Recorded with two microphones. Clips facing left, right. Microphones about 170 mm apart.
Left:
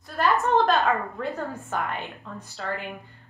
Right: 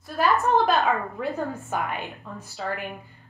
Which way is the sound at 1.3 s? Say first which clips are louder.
Right 2 dB; 15° right (ahead or behind).